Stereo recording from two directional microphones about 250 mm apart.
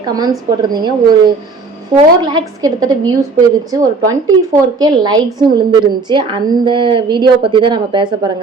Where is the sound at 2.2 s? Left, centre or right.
Centre.